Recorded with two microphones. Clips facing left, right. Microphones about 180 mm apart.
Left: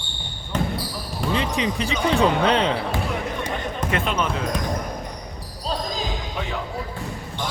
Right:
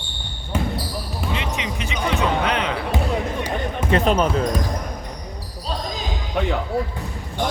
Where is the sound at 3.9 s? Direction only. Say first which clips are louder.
Right 7 dB; 35° right (ahead or behind).